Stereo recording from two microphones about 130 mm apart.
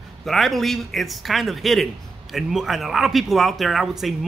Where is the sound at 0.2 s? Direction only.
Centre (ahead or behind).